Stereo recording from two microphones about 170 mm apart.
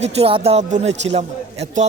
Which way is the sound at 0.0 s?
35° right (ahead or behind).